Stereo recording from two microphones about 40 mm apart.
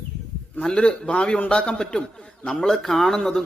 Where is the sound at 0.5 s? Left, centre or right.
Left.